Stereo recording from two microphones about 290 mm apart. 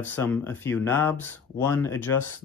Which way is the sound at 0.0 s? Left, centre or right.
Centre.